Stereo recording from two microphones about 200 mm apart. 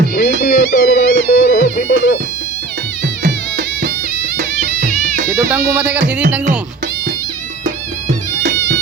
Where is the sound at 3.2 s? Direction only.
60° right (ahead or behind).